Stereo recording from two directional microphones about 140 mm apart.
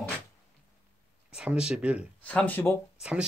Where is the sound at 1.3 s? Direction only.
5° right (ahead or behind).